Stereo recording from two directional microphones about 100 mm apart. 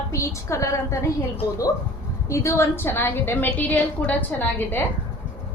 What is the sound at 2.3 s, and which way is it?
A woman's voice, 30° left (ahead or behind).